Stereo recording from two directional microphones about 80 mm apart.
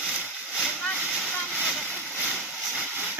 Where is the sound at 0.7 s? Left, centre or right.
Centre.